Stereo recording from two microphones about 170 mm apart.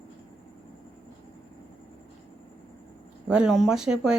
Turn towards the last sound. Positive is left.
turn(degrees=-5)  # may be behind; listen again after turning